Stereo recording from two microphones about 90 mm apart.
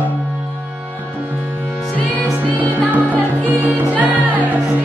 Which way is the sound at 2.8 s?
20° right (ahead or behind).